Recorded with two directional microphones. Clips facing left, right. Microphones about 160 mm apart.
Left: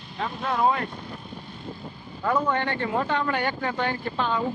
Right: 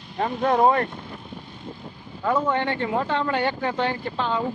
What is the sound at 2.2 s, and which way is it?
Speech, 20° right (ahead or behind).